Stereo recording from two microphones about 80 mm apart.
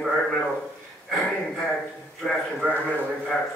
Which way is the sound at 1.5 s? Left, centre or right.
Centre.